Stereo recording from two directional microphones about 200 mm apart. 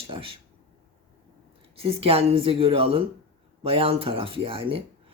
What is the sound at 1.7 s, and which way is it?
Speech, 30° right (ahead or behind).